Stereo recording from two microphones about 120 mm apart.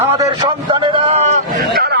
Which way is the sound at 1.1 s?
70° right (ahead or behind).